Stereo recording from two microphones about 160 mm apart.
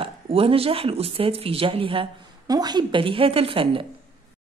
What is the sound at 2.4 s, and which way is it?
Speech, 25° right (ahead or behind).